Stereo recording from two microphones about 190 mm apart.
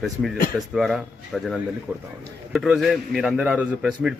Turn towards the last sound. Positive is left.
turn(degrees=-5)  # may be behind; listen again after turning